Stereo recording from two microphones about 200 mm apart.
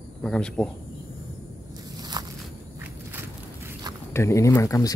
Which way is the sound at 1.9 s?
20° right (ahead or behind).